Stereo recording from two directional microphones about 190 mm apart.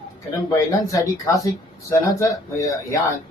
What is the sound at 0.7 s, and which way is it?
A man's voice, 15° left (ahead or behind).